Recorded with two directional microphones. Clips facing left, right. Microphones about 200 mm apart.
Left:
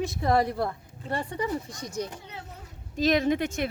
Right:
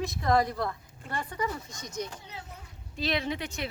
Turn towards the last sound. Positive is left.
turn(degrees=50)  # may be behind; listen again after turning